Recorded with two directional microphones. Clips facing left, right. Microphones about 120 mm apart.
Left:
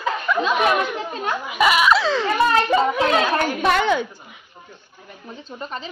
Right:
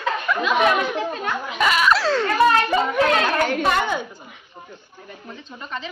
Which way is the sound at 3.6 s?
75° left (ahead or behind).